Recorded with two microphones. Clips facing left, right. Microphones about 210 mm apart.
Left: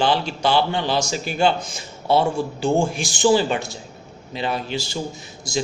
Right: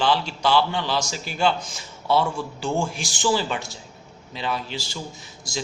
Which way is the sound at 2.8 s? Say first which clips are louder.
Left 5 dB; 55° left (ahead or behind).